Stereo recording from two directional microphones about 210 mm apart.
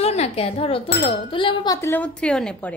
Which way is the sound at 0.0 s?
30° left (ahead or behind).